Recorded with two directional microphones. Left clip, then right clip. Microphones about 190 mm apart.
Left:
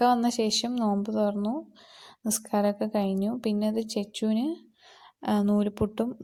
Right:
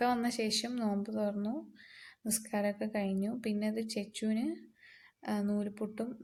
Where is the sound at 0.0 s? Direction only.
25° left (ahead or behind).